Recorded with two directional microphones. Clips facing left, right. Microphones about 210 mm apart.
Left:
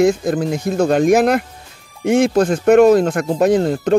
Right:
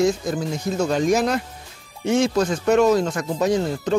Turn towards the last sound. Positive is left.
turn(degrees=55)  # may be behind; listen again after turning